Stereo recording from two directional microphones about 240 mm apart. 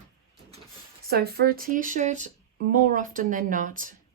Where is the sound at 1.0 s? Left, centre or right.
Right.